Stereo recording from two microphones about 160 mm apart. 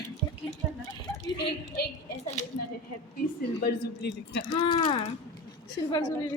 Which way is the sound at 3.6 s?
90° left.